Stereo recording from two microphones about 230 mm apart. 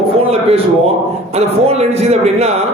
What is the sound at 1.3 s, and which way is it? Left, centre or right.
A man's voice, right.